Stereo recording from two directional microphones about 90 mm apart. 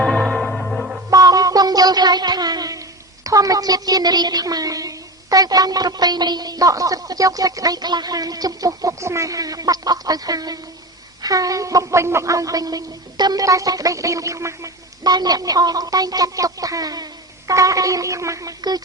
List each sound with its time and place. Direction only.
0.0 s music: centre (ahead or behind)
1.1 s a sound: 45° right (ahead or behind)
3.2 s speech: 40° right (ahead or behind)